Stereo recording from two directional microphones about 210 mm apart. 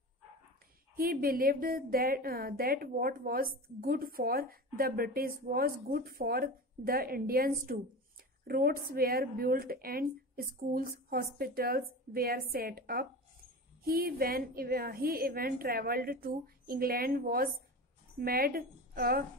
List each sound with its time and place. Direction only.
0.9 s a woman's voice: 45° right (ahead or behind)